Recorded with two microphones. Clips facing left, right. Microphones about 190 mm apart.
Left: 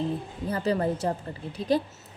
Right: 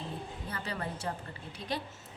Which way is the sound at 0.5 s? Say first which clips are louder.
Left 14 dB; 35° left (ahead or behind).